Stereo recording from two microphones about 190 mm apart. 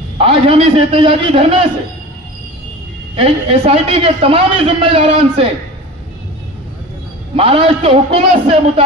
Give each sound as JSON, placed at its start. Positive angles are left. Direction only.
{"t": 0.2, "sound": "a man's voice", "side_deg": -30}
{"t": 3.2, "sound": "a man's voice", "side_deg": -30}
{"t": 7.3, "sound": "a man's voice", "side_deg": -30}